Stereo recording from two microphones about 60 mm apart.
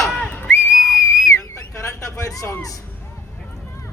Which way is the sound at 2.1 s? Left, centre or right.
Left.